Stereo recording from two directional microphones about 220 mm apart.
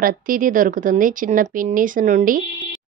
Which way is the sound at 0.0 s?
40° right (ahead or behind).